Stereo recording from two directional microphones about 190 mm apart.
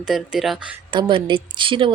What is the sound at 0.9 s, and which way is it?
Speech, 25° right (ahead or behind).